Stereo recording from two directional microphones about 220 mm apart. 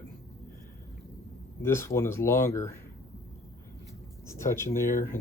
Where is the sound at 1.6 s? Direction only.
10° left (ahead or behind).